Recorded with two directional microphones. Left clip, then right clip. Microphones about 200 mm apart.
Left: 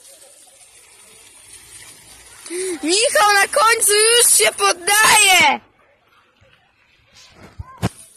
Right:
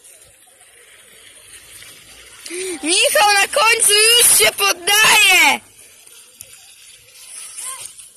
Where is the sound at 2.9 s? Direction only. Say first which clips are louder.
Right 1 dB; 15° left (ahead or behind).